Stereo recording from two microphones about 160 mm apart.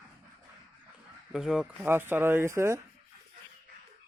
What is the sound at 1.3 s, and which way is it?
Speech, 5° right (ahead or behind).